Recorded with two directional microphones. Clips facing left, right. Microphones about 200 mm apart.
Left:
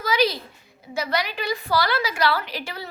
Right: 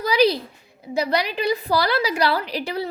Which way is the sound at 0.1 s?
35° right (ahead or behind).